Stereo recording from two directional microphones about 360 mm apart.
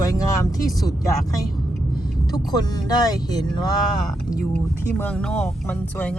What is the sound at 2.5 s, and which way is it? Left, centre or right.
Speech, centre.